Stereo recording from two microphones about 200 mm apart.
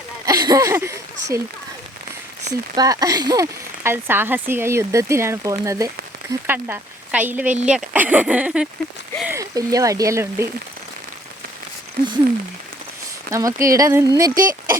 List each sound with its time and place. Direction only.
0.3 s speech: 15° right (ahead or behind)
2.5 s speech: 20° right (ahead or behind)
13.3 s speech: 15° right (ahead or behind)